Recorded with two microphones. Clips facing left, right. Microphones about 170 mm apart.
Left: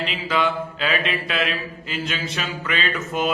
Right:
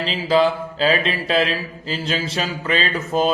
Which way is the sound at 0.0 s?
30° right (ahead or behind).